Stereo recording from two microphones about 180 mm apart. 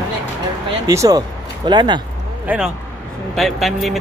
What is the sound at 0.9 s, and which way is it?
Speech, 20° right (ahead or behind).